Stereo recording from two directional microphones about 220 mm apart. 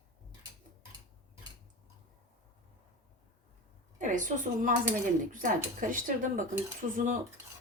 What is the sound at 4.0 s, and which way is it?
Speech, 35° right (ahead or behind).